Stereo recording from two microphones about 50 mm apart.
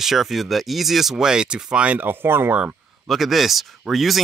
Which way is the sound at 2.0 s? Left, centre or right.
Right.